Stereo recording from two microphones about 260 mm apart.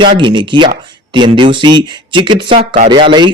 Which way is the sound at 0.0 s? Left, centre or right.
Centre.